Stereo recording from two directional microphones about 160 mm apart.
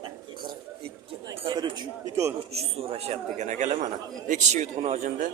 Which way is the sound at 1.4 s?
30° right (ahead or behind).